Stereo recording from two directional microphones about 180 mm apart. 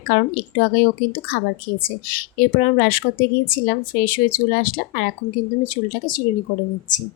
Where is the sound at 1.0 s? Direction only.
50° left (ahead or behind).